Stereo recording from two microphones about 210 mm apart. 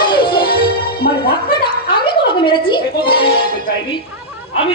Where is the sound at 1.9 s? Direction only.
20° left (ahead or behind).